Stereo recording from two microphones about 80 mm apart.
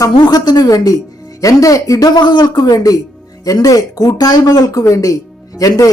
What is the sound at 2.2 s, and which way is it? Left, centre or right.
Speech, left.